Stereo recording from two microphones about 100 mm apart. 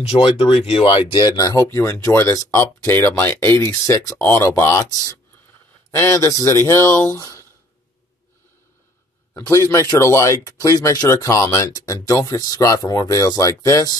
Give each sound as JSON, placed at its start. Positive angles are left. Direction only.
{"t": 0.0, "sound": "speech", "side_deg": 90}
{"t": 1.3, "sound": "speech", "side_deg": 35}
{"t": 9.3, "sound": "speech", "side_deg": 35}